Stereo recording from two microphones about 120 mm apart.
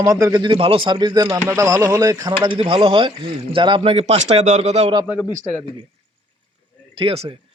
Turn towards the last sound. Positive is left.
turn(degrees=-50)  # may be behind; listen again after turning